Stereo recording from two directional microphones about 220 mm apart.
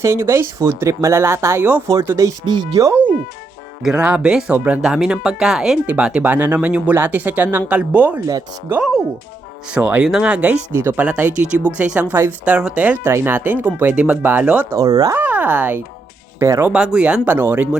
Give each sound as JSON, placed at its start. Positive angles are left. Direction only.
{"t": 0.0, "sound": "speech", "side_deg": -10}
{"t": 8.8, "sound": "speech", "side_deg": 0}